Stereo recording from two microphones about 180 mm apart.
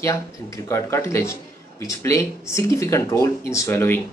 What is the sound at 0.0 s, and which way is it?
Speech, 15° left (ahead or behind).